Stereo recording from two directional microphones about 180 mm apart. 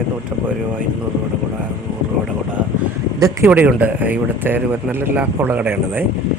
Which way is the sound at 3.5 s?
5° right (ahead or behind).